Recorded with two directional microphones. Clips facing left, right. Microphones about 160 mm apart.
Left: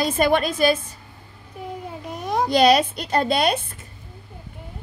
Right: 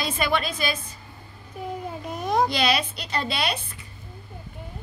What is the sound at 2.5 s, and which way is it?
A woman's voice, 45° left (ahead or behind).